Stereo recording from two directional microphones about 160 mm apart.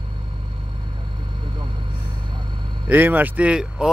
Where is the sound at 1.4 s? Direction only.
30° right (ahead or behind).